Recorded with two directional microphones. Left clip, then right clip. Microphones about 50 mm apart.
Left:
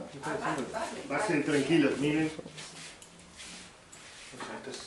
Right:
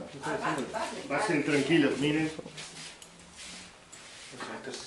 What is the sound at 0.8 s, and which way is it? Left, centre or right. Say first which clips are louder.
Speech: right 1 dB; centre.